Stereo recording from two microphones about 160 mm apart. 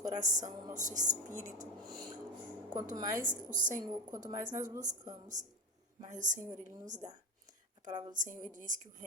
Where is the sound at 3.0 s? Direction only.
20° right (ahead or behind).